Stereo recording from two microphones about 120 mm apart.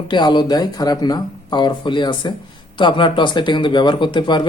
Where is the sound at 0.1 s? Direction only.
40° left (ahead or behind).